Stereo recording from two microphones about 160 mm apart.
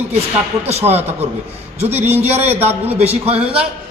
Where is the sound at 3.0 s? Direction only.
40° right (ahead or behind).